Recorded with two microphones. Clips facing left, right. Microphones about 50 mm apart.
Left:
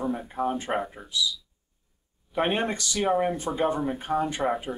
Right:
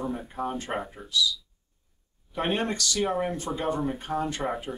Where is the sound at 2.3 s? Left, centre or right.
Centre.